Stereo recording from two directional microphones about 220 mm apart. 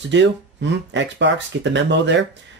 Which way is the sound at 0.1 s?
55° right (ahead or behind).